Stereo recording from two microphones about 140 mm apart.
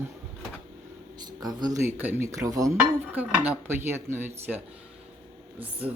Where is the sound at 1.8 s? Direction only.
15° right (ahead or behind).